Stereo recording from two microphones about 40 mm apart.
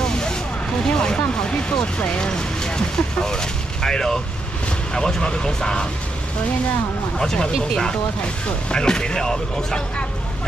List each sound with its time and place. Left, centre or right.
0.0 s vehicle: centre
0.8 s speech: left
7.2 s speech: centre